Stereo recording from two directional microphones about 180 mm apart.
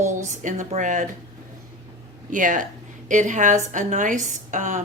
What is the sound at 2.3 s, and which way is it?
A woman's voice, 45° right (ahead or behind).